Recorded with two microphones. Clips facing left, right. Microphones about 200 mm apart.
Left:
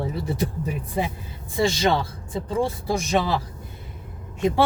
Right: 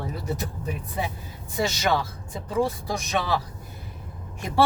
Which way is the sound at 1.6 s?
30° left (ahead or behind).